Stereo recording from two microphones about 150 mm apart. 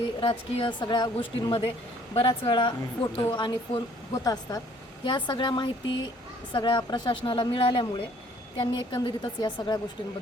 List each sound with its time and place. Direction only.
0.2 s a woman's voice: 35° left (ahead or behind)